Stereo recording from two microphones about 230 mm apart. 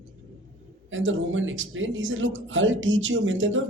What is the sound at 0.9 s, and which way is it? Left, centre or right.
Speech, right.